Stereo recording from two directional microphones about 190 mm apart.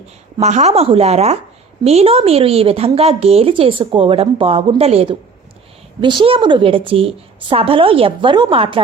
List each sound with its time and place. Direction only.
0.3 s a woman's voice: 35° right (ahead or behind)